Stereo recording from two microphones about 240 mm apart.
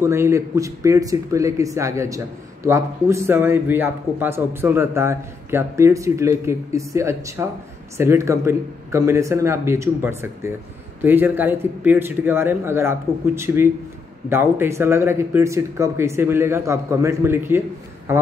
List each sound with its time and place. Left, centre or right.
0.0 s speech: centre